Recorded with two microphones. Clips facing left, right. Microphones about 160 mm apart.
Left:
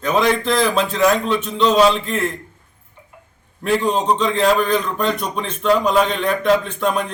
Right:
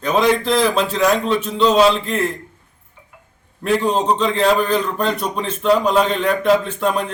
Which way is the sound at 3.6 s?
Centre (ahead or behind).